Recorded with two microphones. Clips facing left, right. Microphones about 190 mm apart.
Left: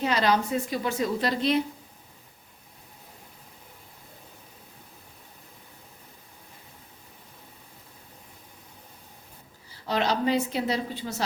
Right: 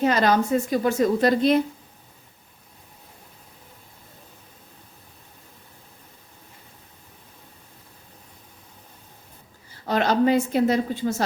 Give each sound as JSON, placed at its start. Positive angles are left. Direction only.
{"t": 0.0, "sound": "a woman's voice", "side_deg": -50}
{"t": 9.8, "sound": "a woman's voice", "side_deg": -50}